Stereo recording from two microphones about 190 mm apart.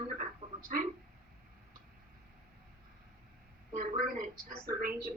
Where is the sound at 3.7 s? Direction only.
45° right (ahead or behind).